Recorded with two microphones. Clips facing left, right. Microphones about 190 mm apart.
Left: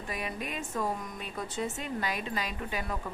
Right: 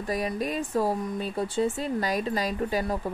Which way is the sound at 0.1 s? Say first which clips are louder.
Right 9 dB; 35° right (ahead or behind).